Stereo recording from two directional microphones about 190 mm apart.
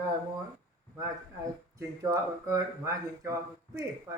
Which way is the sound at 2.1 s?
15° right (ahead or behind).